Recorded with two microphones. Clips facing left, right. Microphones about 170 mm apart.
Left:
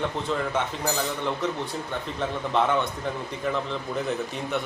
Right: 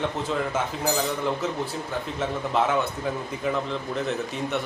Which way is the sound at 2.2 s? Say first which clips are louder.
Even; 5° right (ahead or behind).